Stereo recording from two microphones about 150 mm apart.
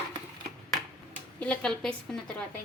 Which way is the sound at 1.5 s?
5° left (ahead or behind).